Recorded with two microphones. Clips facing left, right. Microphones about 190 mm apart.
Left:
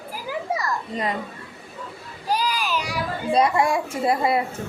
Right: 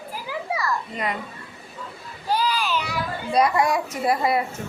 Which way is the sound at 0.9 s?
35° left (ahead or behind).